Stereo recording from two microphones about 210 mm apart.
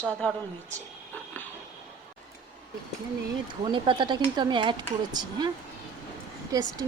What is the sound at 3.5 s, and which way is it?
Speech, 20° right (ahead or behind).